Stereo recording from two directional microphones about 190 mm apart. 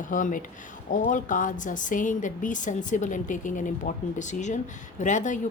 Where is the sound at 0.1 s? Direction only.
45° left (ahead or behind).